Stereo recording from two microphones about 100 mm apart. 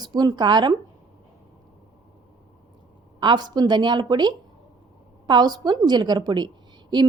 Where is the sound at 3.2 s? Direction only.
50° right (ahead or behind).